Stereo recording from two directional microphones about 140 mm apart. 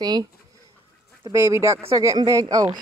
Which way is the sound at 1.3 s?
20° right (ahead or behind).